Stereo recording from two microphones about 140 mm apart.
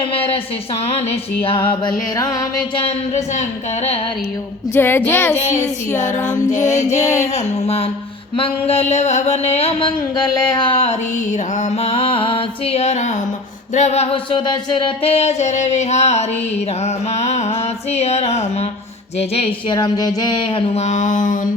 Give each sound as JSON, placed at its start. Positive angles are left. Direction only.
{"t": 0.1, "sound": "music", "side_deg": 45}
{"t": 3.3, "sound": "music", "side_deg": 50}
{"t": 4.7, "sound": "child singing", "side_deg": 15}
{"t": 6.0, "sound": "music", "side_deg": 60}
{"t": 7.0, "sound": "a sound", "side_deg": 25}
{"t": 8.4, "sound": "music", "side_deg": 45}
{"t": 10.2, "sound": "a sound", "side_deg": 30}
{"t": 10.8, "sound": "music", "side_deg": 55}
{"t": 19.7, "sound": "music", "side_deg": 30}